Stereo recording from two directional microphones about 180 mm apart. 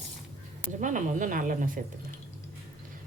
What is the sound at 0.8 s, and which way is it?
Speech, 45° right (ahead or behind).